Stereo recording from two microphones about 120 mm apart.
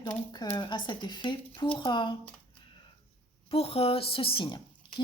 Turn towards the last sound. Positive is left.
turn(degrees=50)  # may be behind; listen again after turning